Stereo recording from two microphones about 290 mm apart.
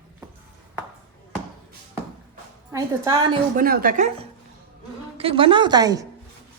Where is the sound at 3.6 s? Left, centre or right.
Right; by 6.1 s centre.